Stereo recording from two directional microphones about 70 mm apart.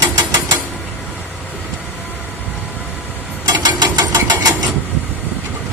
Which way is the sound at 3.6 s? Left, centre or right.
Right.